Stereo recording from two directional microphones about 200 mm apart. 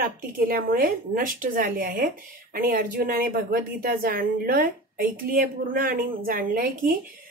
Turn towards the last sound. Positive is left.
turn(degrees=-45)  # may be behind; listen again after turning